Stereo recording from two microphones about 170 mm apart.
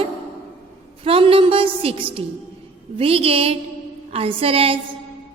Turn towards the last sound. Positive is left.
turn(degrees=-35)  # may be behind; listen again after turning